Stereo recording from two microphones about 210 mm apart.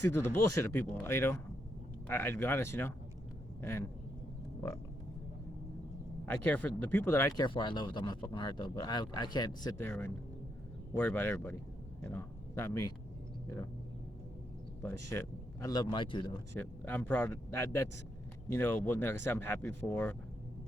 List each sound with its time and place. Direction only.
0.0 s speech: 10° left (ahead or behind)
6.2 s speech: 5° left (ahead or behind)
14.8 s a man's voice: 10° left (ahead or behind)
16.6 s speech: 10° left (ahead or behind)